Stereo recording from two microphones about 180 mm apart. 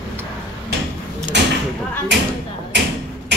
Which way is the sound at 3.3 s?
70° right (ahead or behind).